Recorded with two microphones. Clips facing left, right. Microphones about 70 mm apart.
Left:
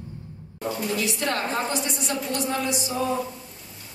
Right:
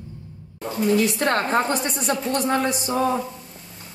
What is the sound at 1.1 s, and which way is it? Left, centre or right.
A woman's voice, right.